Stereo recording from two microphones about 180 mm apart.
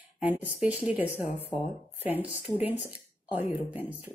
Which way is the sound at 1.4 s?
35° left (ahead or behind).